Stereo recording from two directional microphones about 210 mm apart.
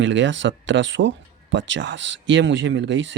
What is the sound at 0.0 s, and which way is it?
Speech, 60° right (ahead or behind).